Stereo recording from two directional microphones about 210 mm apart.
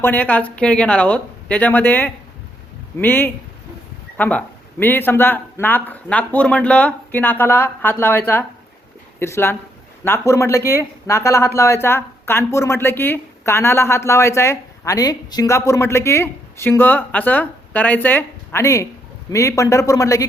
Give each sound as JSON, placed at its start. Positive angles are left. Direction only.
{"t": 0.0, "sound": "speech", "side_deg": 10}